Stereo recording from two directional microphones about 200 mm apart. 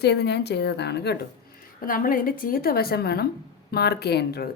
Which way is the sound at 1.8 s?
45° left (ahead or behind).